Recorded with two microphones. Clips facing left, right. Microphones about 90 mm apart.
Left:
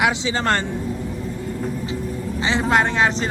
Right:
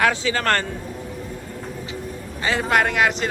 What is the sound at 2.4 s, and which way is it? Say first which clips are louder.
Speech: left 1 dB; 20° left (ahead or behind).